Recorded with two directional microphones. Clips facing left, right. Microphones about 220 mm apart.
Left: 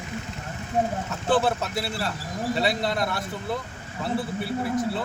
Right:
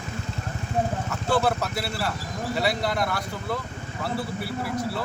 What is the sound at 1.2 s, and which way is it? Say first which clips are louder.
A man's voice: left 1 dB; 25° left (ahead or behind).